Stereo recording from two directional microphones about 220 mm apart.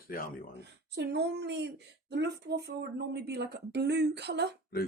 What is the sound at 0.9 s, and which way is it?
Speech, 50° right (ahead or behind).